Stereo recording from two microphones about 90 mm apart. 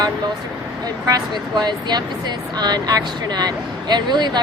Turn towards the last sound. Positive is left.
turn(degrees=-55)  # may be behind; listen again after turning